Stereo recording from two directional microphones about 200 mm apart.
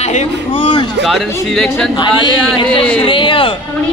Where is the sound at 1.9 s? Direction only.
20° left (ahead or behind).